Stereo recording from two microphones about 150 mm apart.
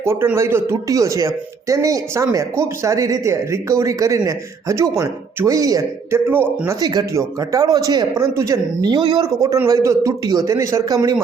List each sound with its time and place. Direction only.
0.0 s speech: 15° right (ahead or behind)
6.7 s speech: 25° right (ahead or behind)